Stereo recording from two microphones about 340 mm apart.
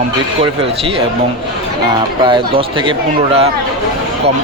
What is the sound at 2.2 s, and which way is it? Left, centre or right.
Speech, centre.